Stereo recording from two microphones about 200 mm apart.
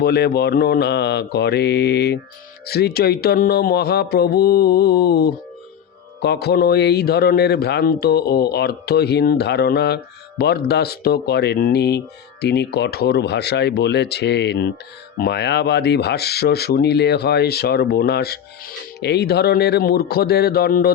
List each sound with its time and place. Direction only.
0.0 s speech: 55° left (ahead or behind)